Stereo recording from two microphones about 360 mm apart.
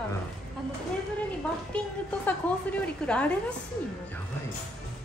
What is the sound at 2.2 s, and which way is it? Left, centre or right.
A woman's voice, centre.